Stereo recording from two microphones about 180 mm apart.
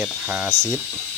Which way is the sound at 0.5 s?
80° right.